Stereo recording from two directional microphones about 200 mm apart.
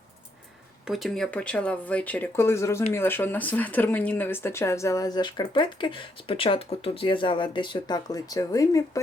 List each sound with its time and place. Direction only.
0.9 s speech: centre (ahead or behind); by 8.8 s 15° left (ahead or behind)